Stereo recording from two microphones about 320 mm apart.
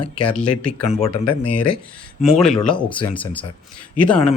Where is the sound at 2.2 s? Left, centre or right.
Centre.